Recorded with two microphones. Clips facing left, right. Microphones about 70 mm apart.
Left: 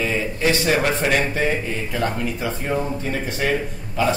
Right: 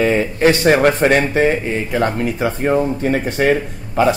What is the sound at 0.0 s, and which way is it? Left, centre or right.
Speech, right.